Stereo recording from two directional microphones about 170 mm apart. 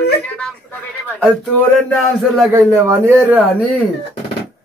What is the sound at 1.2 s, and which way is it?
Speech, 5° left (ahead or behind).